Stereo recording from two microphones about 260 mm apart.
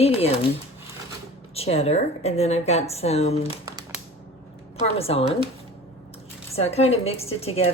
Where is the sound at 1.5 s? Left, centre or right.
Left.